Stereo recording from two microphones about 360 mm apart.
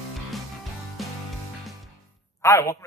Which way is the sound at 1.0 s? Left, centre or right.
Centre.